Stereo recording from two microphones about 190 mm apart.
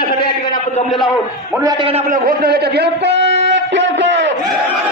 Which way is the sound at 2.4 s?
55° right (ahead or behind).